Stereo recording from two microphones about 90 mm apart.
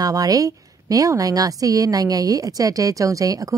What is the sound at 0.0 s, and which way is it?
A woman's voice, 45° right (ahead or behind).